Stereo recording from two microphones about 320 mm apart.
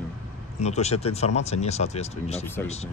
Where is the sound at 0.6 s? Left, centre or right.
Left.